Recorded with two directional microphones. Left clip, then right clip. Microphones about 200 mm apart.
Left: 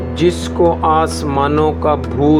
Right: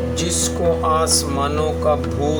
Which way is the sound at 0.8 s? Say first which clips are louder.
Left 4 dB; 35° left (ahead or behind).